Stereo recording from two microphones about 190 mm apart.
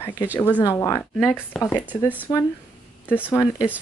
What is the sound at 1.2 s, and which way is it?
Speech, centre (ahead or behind).